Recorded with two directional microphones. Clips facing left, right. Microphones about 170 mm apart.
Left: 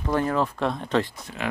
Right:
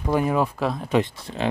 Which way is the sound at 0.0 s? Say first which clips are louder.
Right 2 dB; 10° right (ahead or behind).